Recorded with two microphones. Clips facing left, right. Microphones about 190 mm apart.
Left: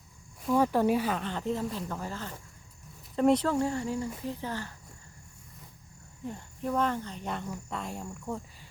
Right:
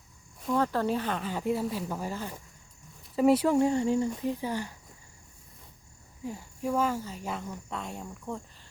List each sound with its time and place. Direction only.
0.4 s speech: 10° left (ahead or behind)
1.2 s speech: 10° right (ahead or behind)
6.2 s speech: 10° right (ahead or behind)